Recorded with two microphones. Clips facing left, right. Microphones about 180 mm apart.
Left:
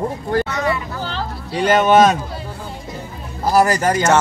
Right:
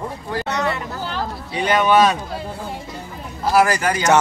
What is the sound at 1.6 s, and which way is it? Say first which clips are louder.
Speech: left 3 dB; 45° left (ahead or behind).